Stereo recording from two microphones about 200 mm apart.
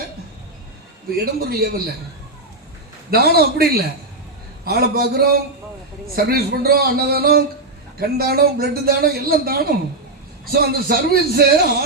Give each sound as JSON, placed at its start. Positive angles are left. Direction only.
{"t": 1.1, "sound": "a man's voice", "side_deg": -50}
{"t": 3.1, "sound": "a man's voice", "side_deg": -50}